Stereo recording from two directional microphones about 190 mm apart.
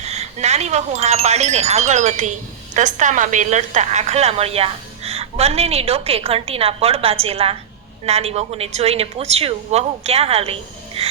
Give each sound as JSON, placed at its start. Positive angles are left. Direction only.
{"t": 0.0, "sound": "a woman's voice", "side_deg": -35}